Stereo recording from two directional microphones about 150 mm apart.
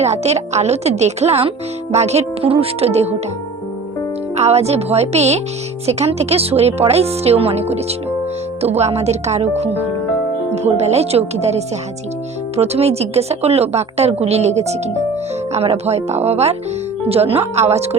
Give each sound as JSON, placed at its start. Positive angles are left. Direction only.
{"t": 0.0, "sound": "speech", "side_deg": -45}
{"t": 4.4, "sound": "speech", "side_deg": -45}